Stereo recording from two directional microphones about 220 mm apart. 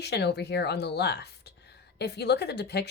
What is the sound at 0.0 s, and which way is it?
Speech, 50° left (ahead or behind).